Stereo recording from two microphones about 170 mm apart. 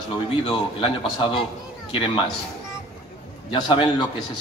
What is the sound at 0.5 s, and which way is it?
A man's voice, 30° left (ahead or behind).